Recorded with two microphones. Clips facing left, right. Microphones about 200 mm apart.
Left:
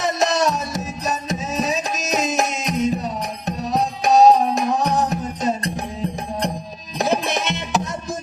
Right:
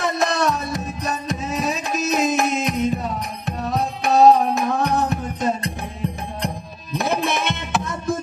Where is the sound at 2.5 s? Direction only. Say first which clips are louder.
Even; 55° right (ahead or behind).